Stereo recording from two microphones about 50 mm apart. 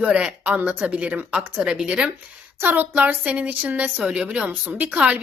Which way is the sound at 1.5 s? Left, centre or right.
Centre.